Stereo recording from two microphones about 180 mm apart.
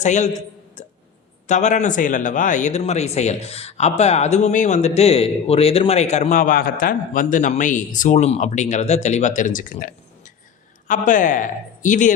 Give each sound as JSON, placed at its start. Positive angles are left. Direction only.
{"t": 0.0, "sound": "speech", "side_deg": 40}
{"t": 0.8, "sound": "hiccup", "side_deg": 40}
{"t": 1.5, "sound": "speech", "side_deg": 40}